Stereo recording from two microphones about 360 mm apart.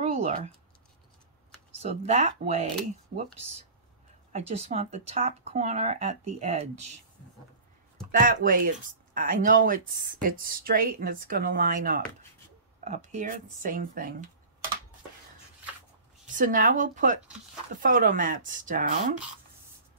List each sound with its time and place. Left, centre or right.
0.0 s a sound: centre
1.8 s speech: centre
4.3 s speech: centre
8.1 s speech: right
16.3 s speech: right